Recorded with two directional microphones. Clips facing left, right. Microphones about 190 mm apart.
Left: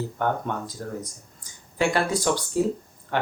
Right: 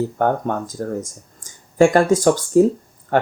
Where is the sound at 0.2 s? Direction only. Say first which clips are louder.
Right 5 dB; 45° right (ahead or behind).